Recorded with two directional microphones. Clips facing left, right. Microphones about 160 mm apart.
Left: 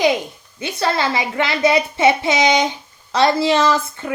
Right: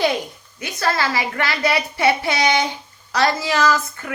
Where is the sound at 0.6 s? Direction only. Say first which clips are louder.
Left 2 dB; 25° left (ahead or behind).